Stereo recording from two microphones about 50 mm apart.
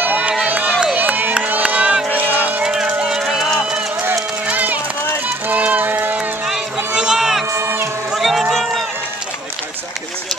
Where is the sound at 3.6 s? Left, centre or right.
Centre.